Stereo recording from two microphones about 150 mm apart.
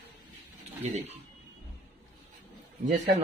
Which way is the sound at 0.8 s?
45° right (ahead or behind).